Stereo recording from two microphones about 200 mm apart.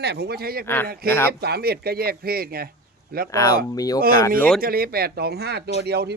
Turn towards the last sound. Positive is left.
turn(degrees=-55)  # may be behind; listen again after turning